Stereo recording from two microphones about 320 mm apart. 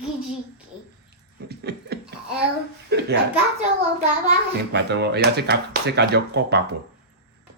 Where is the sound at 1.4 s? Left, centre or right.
Right.